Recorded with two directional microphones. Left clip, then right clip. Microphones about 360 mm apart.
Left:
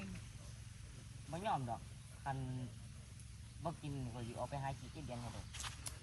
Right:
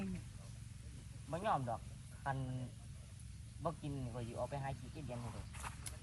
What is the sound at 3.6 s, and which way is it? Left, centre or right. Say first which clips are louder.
Speech: right 3 dB; centre.